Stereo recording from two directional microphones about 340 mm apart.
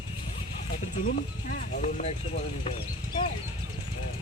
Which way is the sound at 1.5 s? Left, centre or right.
Left.